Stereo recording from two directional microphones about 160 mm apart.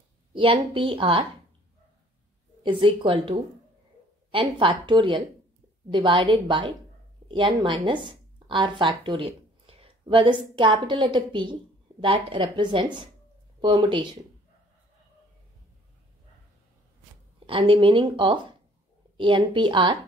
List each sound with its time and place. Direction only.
0.3 s speech: 35° right (ahead or behind)
2.6 s speech: 30° right (ahead or behind)
17.5 s speech: 35° right (ahead or behind)